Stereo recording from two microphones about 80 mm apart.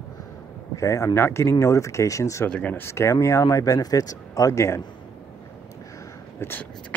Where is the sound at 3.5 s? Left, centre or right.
Left.